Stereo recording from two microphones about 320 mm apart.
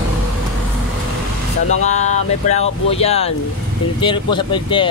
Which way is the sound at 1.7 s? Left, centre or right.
Left.